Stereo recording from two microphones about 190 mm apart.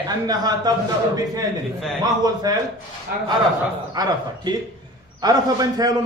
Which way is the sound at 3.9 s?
20° right (ahead or behind).